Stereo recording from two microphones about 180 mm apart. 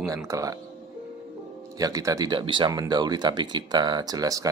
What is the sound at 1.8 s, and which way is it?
Speech, 20° right (ahead or behind).